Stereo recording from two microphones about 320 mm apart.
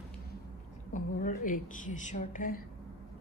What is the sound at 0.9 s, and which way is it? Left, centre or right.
A woman's voice, left.